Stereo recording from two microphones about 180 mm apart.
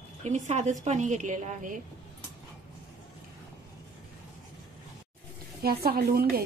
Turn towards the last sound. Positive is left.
turn(degrees=-60)  # may be behind; listen again after turning